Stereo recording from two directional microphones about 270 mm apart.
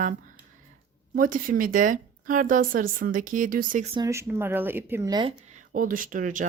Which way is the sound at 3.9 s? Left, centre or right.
Centre.